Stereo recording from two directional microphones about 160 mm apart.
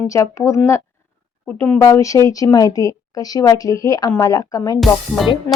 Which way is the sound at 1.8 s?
20° left (ahead or behind).